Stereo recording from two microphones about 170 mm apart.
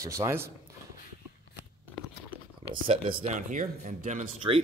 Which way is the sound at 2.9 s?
35° right (ahead or behind).